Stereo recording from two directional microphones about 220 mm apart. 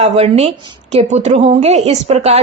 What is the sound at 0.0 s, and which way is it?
A woman's voice, 30° right (ahead or behind).